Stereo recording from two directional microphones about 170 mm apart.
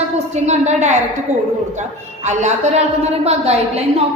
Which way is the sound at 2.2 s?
40° right (ahead or behind).